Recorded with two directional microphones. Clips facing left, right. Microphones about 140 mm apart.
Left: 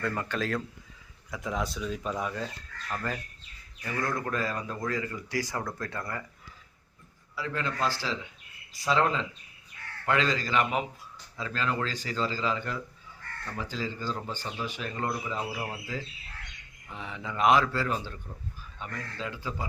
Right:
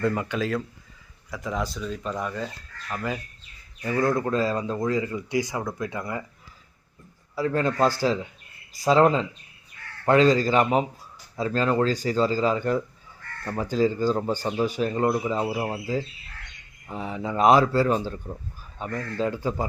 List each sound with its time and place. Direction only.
0.0 s speech: 15° right (ahead or behind)
0.3 s speech: 5° right (ahead or behind)
2.9 s speech: 10° right (ahead or behind)
3.8 s speech: 25° right (ahead or behind)
7.3 s speech: 40° right (ahead or behind)